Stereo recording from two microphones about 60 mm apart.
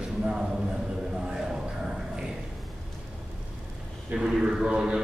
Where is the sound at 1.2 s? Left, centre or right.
Centre.